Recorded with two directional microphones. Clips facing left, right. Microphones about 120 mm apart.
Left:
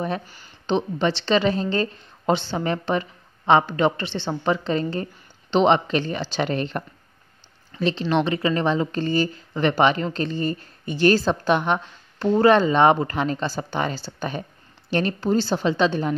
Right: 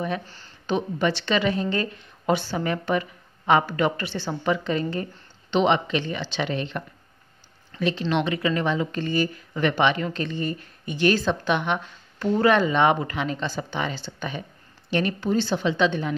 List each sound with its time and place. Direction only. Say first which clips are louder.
0.7 s a woman's voice: left 2 dB; 25° left (ahead or behind); by 6.8 s 45° left (ahead or behind)
7.8 s speech: left 2 dB; 30° left (ahead or behind)